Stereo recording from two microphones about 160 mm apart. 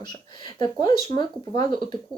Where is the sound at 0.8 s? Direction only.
30° left (ahead or behind).